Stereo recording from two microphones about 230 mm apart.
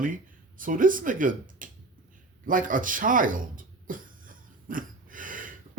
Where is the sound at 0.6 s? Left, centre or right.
Right.